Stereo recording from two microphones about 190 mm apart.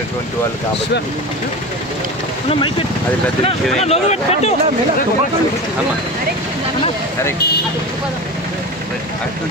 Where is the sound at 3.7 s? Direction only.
35° left (ahead or behind).